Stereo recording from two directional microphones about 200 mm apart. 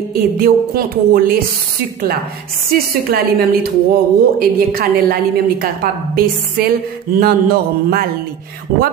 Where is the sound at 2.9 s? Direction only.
50° right (ahead or behind).